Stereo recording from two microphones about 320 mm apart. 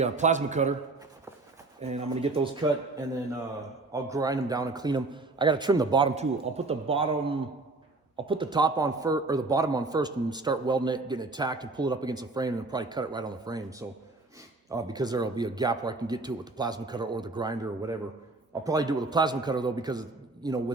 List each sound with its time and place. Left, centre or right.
0.0 s speech: right
1.8 s speech: centre
4.1 s speech: centre